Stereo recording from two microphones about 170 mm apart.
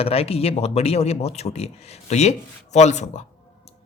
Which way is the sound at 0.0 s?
35° left (ahead or behind).